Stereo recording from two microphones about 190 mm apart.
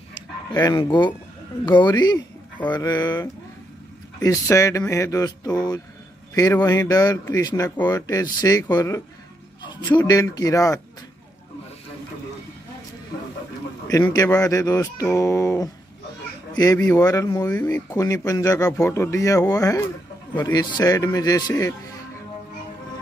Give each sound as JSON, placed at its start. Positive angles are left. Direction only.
{"t": 0.5, "sound": "speech", "side_deg": 20}
{"t": 4.2, "sound": "speech", "side_deg": 15}
{"t": 13.8, "sound": "speech", "side_deg": 20}
{"t": 16.7, "sound": "speech", "side_deg": 10}